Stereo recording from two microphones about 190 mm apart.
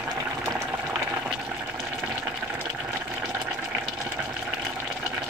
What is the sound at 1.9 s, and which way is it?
Water, 10° right (ahead or behind).